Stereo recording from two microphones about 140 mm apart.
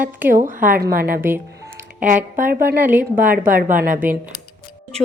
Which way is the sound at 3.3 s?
85° right.